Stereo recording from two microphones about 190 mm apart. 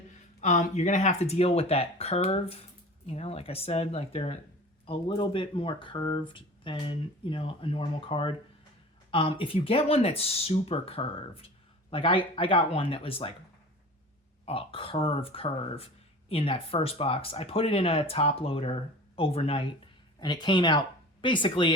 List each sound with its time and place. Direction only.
0.4 s speech: 40° left (ahead or behind)
14.4 s speech: 30° left (ahead or behind)